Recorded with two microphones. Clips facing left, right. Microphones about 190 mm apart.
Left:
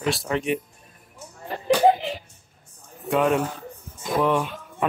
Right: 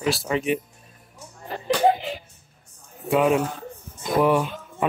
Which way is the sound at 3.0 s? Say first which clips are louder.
Right 1 dB; 5° right (ahead or behind).